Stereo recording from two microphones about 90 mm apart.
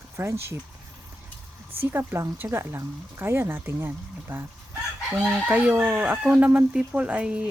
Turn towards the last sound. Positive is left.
turn(degrees=-15)  # may be behind; listen again after turning